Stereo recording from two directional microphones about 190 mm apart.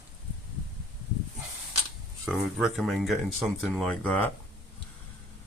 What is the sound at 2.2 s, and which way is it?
Speech, centre (ahead or behind).